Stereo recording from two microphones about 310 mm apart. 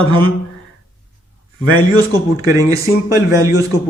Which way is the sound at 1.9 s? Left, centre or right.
Centre.